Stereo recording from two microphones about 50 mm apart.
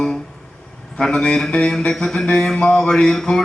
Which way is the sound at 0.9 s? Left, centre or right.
Centre.